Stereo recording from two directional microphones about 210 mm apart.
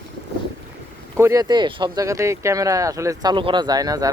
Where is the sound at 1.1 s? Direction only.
15° right (ahead or behind).